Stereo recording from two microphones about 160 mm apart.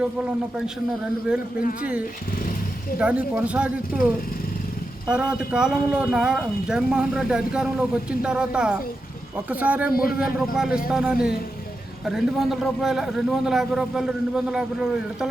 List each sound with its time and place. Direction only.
1.8 s speech: 10° right (ahead or behind)
9.9 s a man's voice: 65° left (ahead or behind)
10.2 s speech: 5° right (ahead or behind)